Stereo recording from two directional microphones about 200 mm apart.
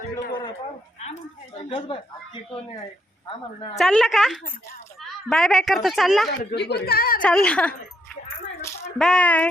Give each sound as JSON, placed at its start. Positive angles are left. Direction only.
{"t": 1.5, "sound": "speech", "side_deg": 25}
{"t": 3.8, "sound": "a woman's voice", "side_deg": 0}
{"t": 6.4, "sound": "a woman's voice", "side_deg": 55}
{"t": 7.2, "sound": "a woman's voice", "side_deg": 5}
{"t": 9.0, "sound": "a woman's voice", "side_deg": 5}